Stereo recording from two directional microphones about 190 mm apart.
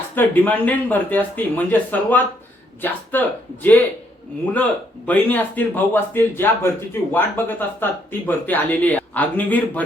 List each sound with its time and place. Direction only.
0.2 s speech: 10° left (ahead or behind)